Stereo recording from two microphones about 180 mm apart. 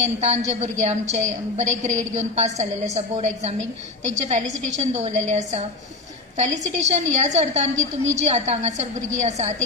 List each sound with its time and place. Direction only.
0.2 s a woman's voice: 40° right (ahead or behind)